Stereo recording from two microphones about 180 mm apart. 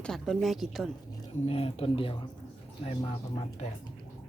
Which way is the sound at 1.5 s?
30° left (ahead or behind).